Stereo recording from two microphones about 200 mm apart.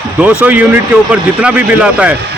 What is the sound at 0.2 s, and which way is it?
Speech, 10° right (ahead or behind).